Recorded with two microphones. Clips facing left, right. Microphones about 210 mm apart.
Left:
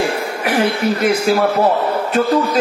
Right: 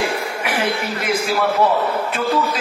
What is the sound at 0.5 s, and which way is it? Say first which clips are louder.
A man's voice: left 7 dB; 40° left (ahead or behind).